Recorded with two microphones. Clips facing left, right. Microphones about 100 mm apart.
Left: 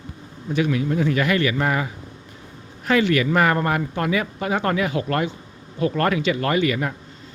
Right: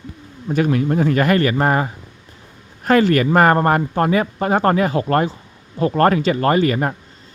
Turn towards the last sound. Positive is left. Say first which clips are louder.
# right 5 dB
turn(degrees=-40)  # may be behind; listen again after turning